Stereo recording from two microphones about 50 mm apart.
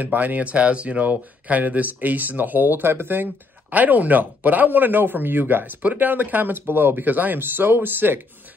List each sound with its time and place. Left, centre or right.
0.0 s speech: right
3.7 s speech: right